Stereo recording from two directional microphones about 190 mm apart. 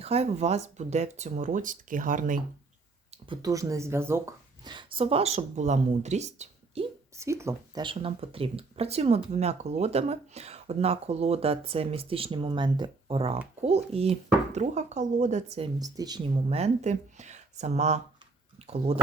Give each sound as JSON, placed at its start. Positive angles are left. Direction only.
{"t": 0.0, "sound": "speech", "side_deg": -35}
{"t": 3.4, "sound": "speech", "side_deg": -15}
{"t": 7.2, "sound": "speech", "side_deg": -15}
{"t": 15.8, "sound": "speech", "side_deg": -20}